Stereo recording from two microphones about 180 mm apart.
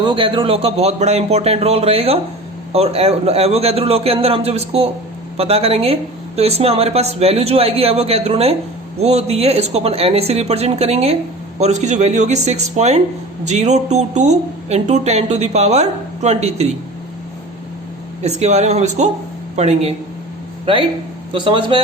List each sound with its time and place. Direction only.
0.0 s speech: 25° right (ahead or behind)
18.2 s speech: 40° right (ahead or behind)